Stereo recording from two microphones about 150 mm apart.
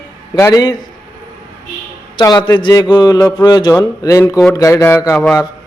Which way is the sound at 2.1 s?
30° left (ahead or behind).